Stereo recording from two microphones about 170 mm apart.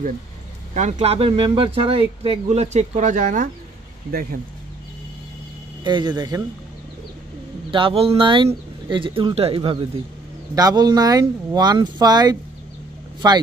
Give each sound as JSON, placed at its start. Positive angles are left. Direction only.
{"t": 0.7, "sound": "speech", "side_deg": -40}
{"t": 5.9, "sound": "speech", "side_deg": -25}
{"t": 7.7, "sound": "speech", "side_deg": -35}